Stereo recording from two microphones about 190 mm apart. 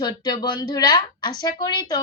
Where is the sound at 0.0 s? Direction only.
20° left (ahead or behind).